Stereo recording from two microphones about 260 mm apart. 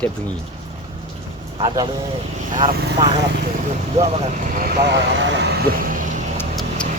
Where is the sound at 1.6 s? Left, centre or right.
Centre.